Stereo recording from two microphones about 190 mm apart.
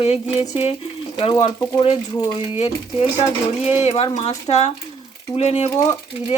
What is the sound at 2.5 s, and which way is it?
Speech, 30° left (ahead or behind).